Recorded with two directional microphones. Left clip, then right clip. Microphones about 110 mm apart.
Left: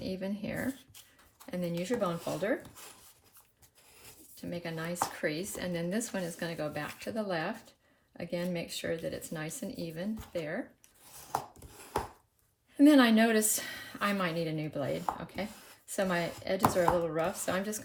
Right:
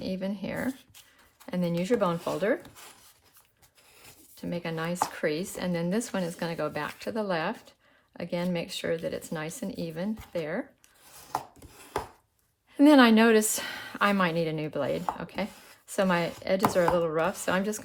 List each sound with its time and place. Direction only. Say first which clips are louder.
0.0 s a woman's voice: right 4 dB; 40° right (ahead or behind)
4.4 s a woman's voice: right 6 dB; 50° right (ahead or behind)
11.1 s chopping: right 2 dB; 15° right (ahead or behind)
12.7 s a woman's voice: right 4 dB; 50° right (ahead or behind)